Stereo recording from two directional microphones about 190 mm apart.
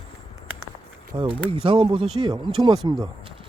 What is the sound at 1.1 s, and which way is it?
Speech, 25° right (ahead or behind).